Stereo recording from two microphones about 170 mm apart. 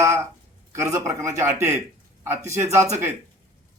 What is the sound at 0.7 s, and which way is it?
Speech, 15° right (ahead or behind).